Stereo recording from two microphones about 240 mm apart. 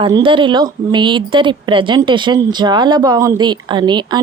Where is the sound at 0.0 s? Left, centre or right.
Centre.